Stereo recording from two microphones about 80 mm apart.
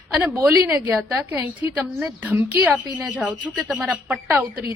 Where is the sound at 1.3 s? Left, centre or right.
Right.